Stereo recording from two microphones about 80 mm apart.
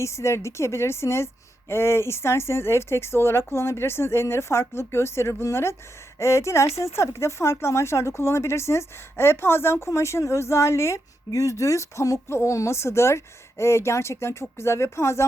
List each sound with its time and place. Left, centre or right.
0.0 s speech: left